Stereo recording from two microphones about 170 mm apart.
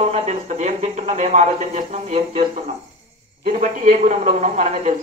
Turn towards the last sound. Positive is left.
turn(degrees=-45)  # may be behind; listen again after turning